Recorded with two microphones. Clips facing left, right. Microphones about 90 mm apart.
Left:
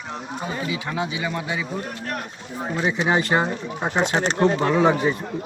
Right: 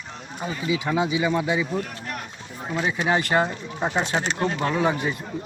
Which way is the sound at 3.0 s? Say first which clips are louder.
Even; 20° left (ahead or behind).